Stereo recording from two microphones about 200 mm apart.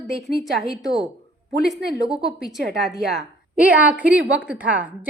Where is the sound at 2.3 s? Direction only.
Centre (ahead or behind).